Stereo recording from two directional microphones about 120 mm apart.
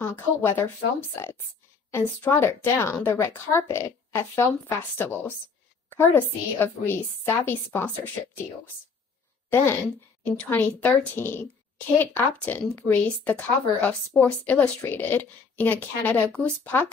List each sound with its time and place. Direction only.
0.0 s a woman's voice: 20° left (ahead or behind)
1.9 s a woman's voice: 15° left (ahead or behind)
9.5 s speech: 15° left (ahead or behind)